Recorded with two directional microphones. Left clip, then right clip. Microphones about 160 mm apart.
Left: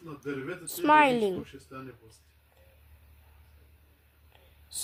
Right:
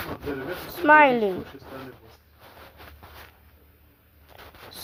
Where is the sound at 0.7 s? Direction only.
15° left (ahead or behind).